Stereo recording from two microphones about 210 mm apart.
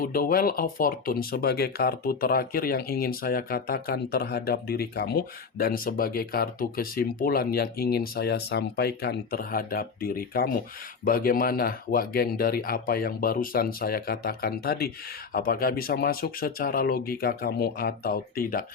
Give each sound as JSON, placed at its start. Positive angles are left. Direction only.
{"t": 0.0, "sound": "speech", "side_deg": 45}